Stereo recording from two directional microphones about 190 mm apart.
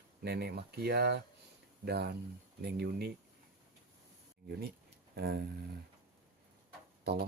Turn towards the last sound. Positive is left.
turn(degrees=-60)  # may be behind; listen again after turning